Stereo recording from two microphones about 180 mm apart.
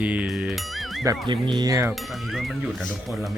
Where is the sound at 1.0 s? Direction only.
25° right (ahead or behind).